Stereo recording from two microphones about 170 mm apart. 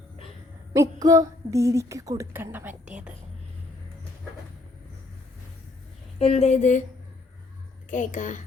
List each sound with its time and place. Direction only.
0.7 s a woman's voice: 20° right (ahead or behind)
6.1 s a woman's voice: 35° left (ahead or behind)
7.9 s a woman's voice: 50° left (ahead or behind)